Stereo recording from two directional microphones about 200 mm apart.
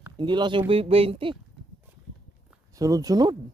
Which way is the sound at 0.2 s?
20° right (ahead or behind).